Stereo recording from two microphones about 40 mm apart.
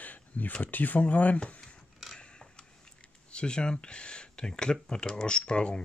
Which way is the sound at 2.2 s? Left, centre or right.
Left.